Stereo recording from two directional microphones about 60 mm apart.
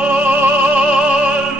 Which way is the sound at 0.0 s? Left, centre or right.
Right.